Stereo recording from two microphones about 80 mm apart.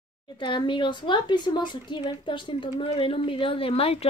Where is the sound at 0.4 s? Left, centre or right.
Left.